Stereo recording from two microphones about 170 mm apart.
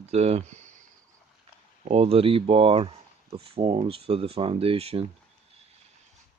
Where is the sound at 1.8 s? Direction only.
35° right (ahead or behind).